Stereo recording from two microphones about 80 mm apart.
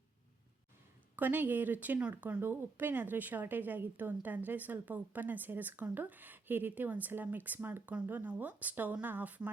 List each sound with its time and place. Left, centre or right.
1.1 s speech: right
2.4 s speech: right